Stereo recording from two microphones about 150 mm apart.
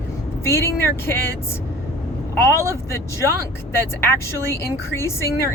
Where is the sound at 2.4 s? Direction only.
15° left (ahead or behind).